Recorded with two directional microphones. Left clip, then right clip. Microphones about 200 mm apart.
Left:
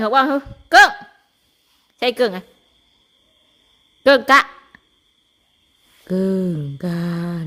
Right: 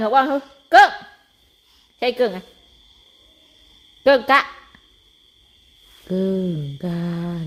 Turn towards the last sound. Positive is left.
turn(degrees=20)  # may be behind; listen again after turning